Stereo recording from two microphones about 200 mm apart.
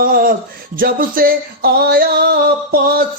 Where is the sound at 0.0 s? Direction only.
45° right (ahead or behind).